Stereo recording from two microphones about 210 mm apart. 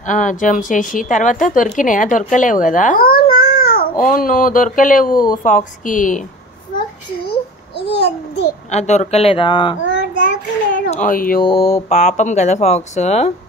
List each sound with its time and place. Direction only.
0.0 s a woman's voice: 35° left (ahead or behind)
7.2 s babbling: 50° left (ahead or behind)
8.6 s speech: 35° left (ahead or behind)
9.8 s child singing: 60° left (ahead or behind)
10.9 s speech: 40° left (ahead or behind)
11.4 s a woman's voice: 25° left (ahead or behind)